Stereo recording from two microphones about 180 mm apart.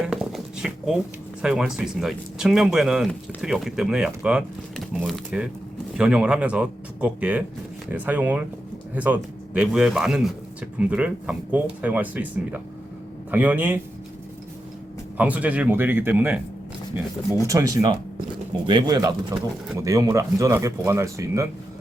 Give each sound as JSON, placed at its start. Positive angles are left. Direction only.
{"t": 0.0, "sound": "a sound", "side_deg": 0}
{"t": 1.4, "sound": "speech", "side_deg": -5}
{"t": 15.2, "sound": "speech", "side_deg": -10}
{"t": 17.4, "sound": "speech", "side_deg": -20}